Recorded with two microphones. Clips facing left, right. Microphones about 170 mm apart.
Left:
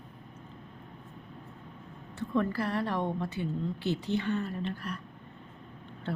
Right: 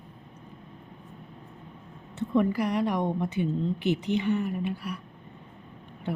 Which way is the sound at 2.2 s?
15° right (ahead or behind).